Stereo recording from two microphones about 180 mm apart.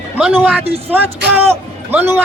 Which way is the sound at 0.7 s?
35° right (ahead or behind).